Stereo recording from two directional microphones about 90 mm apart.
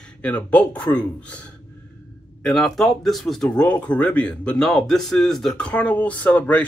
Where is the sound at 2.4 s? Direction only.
5° left (ahead or behind).